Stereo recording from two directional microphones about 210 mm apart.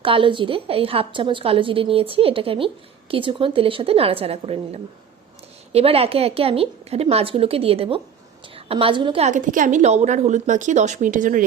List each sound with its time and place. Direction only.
0.0 s a woman's voice: 25° right (ahead or behind)